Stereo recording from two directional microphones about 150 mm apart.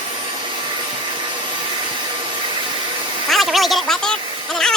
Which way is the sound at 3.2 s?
Centre (ahead or behind).